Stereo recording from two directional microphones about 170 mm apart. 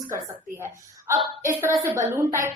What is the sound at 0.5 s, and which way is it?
A woman's voice, 15° right (ahead or behind).